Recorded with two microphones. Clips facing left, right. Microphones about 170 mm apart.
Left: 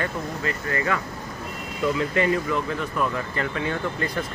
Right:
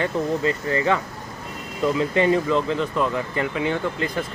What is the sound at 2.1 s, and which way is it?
Speech, 25° right (ahead or behind).